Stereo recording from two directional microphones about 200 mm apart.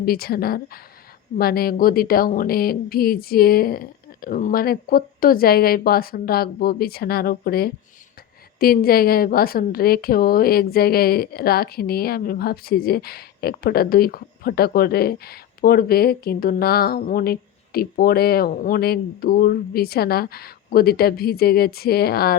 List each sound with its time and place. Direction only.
0.0 s a woman's voice: 50° left (ahead or behind)